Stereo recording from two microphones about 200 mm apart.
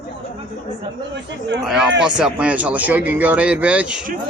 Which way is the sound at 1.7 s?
Centre (ahead or behind).